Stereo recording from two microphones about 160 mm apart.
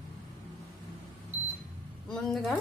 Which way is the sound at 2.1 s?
Centre (ahead or behind).